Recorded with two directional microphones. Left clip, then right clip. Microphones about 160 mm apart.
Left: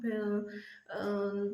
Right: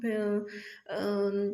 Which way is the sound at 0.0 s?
20° right (ahead or behind).